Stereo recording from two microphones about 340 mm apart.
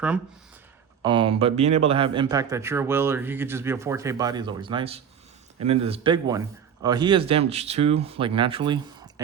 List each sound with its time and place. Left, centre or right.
1.0 s a man's voice: centre